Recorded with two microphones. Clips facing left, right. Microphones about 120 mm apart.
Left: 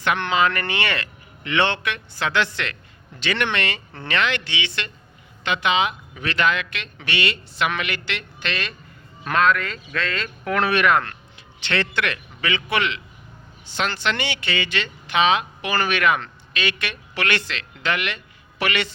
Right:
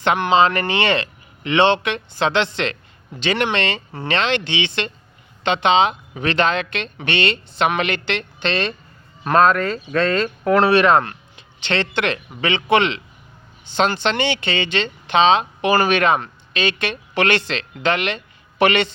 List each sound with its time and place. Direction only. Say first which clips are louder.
0.3 s speech: right 8 dB; 25° right (ahead or behind)